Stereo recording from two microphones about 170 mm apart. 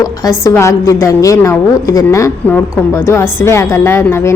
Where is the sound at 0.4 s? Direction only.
15° left (ahead or behind).